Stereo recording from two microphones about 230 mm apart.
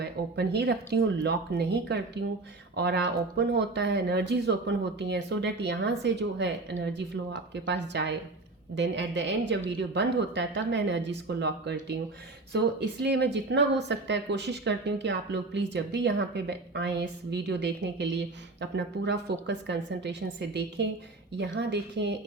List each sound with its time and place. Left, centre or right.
0.0 s speech: right